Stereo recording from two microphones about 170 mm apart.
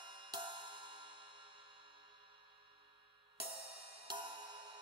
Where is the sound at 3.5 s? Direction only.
35° right (ahead or behind).